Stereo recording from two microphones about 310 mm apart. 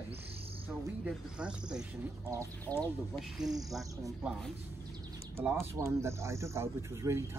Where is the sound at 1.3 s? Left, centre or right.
Centre.